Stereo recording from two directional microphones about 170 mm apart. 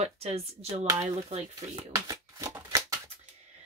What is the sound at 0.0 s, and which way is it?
Speech, 40° right (ahead or behind).